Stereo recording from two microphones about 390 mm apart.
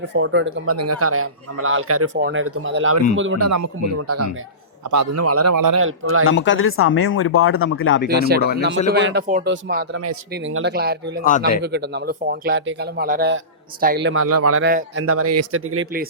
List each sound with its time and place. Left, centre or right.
0.1 s speech: right
5.5 s speech: right
5.8 s speech: right
6.2 s speech: left
8.1 s speech: right
11.2 s speech: left
11.6 s speech: right
14.7 s speech: right
15.0 s speech: right